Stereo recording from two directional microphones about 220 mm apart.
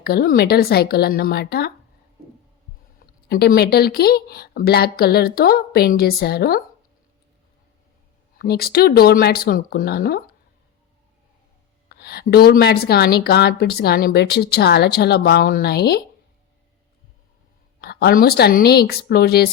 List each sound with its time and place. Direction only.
0.0 s a woman's voice: 45° left (ahead or behind)
3.2 s a woman's voice: 45° left (ahead or behind)
8.4 s a woman's voice: 45° left (ahead or behind)
11.9 s a woman's voice: 45° left (ahead or behind)
17.7 s a woman's voice: 45° left (ahead or behind)